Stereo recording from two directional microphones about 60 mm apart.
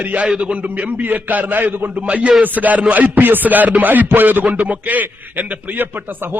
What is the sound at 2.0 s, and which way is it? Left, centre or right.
A man's voice, centre.